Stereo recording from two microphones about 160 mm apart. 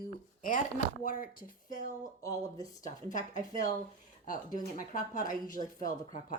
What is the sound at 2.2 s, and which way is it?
Speech, 20° left (ahead or behind).